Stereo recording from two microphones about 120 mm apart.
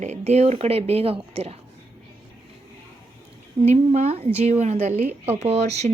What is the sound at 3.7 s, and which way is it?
A woman's voice, 65° right (ahead or behind).